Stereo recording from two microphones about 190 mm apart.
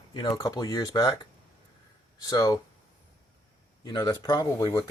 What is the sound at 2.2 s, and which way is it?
Speech, 20° left (ahead or behind).